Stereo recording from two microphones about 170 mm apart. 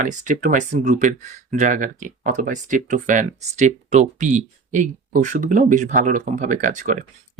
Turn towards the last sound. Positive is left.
turn(degrees=-50)  # may be behind; listen again after turning